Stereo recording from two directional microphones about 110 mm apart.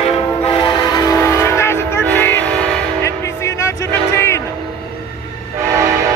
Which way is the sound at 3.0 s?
25° left (ahead or behind).